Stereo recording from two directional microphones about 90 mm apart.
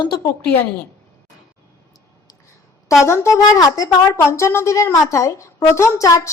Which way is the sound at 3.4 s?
40° left (ahead or behind).